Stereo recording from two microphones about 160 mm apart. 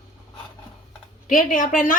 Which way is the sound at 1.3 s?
55° left (ahead or behind).